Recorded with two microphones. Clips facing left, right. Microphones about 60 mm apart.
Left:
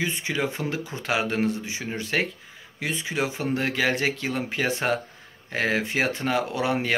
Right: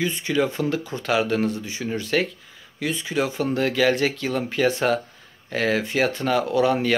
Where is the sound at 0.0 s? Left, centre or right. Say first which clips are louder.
Right 4 dB; centre.